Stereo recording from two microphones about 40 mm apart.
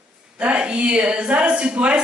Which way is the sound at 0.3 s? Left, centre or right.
Right.